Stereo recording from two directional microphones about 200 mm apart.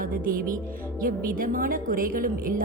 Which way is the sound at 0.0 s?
45° right (ahead or behind).